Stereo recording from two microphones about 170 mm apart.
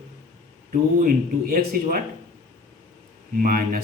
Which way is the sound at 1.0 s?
55° right (ahead or behind).